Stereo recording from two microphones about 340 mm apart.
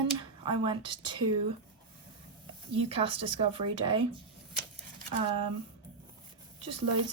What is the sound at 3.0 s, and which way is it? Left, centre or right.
Speech, centre.